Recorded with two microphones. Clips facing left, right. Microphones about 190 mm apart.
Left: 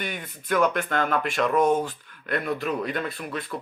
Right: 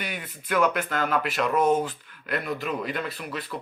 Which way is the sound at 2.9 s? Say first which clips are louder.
Left 2 dB; 45° left (ahead or behind).